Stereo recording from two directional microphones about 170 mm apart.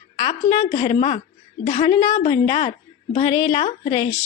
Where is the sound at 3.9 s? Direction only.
15° left (ahead or behind).